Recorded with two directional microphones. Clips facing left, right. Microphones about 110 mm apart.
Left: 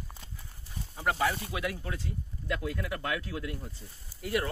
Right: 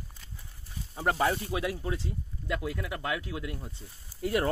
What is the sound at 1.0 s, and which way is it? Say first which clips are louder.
Speech: right 2 dB; 30° right (ahead or behind).